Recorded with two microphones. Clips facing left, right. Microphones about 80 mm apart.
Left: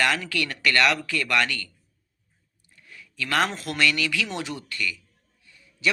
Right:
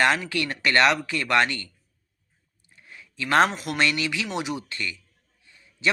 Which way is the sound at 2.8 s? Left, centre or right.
Right.